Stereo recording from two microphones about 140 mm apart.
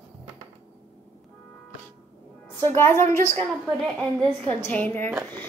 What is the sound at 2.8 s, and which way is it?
Speech, 15° left (ahead or behind).